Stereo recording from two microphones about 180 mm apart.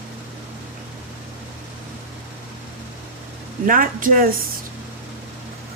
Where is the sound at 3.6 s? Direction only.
50° right (ahead or behind).